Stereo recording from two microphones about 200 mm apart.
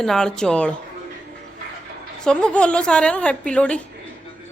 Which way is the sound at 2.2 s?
5° left (ahead or behind).